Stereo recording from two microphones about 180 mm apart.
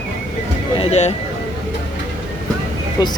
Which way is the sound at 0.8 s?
35° left (ahead or behind).